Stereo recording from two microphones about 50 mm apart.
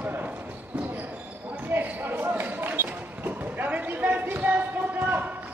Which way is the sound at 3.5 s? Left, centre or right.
Right.